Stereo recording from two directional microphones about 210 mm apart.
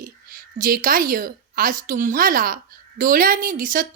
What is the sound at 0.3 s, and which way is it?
A woman's voice, 40° right (ahead or behind).